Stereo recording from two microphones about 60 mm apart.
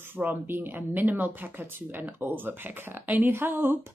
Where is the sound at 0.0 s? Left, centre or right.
Right.